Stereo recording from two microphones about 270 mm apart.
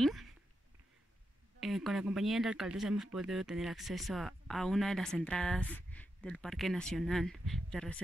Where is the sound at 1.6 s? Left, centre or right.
Centre.